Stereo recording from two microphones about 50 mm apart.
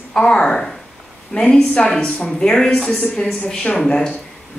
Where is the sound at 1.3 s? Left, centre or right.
Left.